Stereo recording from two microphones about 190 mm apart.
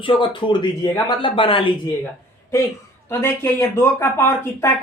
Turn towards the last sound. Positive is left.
turn(degrees=15)  # may be behind; listen again after turning